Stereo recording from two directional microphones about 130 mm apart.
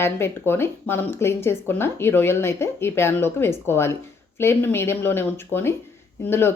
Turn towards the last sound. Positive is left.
turn(degrees=20)  # may be behind; listen again after turning